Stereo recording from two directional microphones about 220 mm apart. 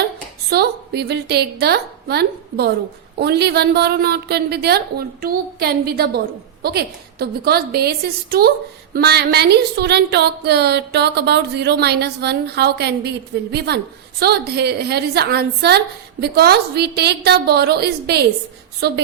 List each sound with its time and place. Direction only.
0.5 s a woman's voice: 45° right (ahead or behind)